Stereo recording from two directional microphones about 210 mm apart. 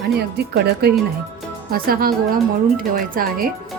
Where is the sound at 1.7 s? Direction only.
45° right (ahead or behind).